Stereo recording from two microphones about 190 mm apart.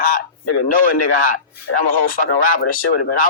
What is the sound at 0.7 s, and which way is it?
Speech, 45° left (ahead or behind).